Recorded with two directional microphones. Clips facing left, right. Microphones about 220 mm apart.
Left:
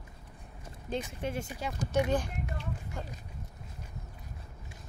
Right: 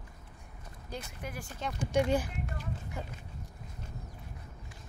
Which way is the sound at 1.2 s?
25° left (ahead or behind).